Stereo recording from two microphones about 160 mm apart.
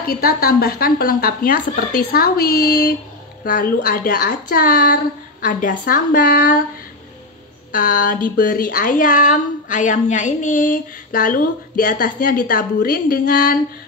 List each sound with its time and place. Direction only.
0.0 s speech: 70° left (ahead or behind)
3.4 s speech: 60° left (ahead or behind)
7.7 s speech: 60° left (ahead or behind)